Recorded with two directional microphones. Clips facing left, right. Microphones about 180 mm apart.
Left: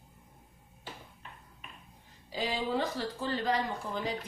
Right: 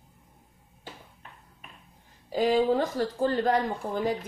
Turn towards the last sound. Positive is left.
turn(degrees=-50)  # may be behind; listen again after turning